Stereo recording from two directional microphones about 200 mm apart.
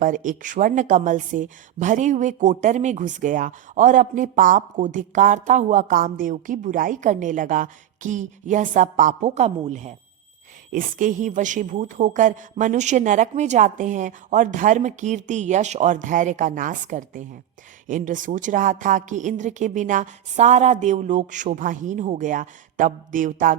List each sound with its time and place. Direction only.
0.0 s speech: 40° right (ahead or behind)